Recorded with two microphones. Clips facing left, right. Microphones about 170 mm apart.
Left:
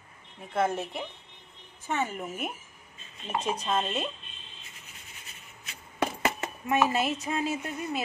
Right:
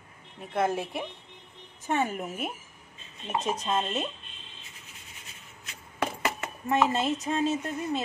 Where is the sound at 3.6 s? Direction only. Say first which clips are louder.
Even; 5° right (ahead or behind).